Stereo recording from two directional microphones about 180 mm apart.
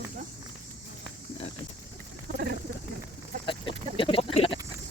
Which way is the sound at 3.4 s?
30° left (ahead or behind).